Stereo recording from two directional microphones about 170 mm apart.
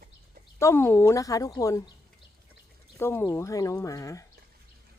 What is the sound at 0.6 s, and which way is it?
Speech, 15° left (ahead or behind).